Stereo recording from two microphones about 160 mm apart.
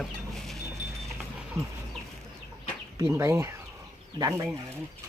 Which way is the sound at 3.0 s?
20° right (ahead or behind).